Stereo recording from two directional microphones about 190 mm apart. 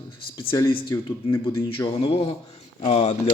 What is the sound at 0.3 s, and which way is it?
Speech, 25° left (ahead or behind).